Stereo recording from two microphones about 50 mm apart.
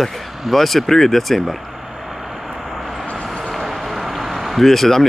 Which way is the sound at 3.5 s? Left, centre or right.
Centre.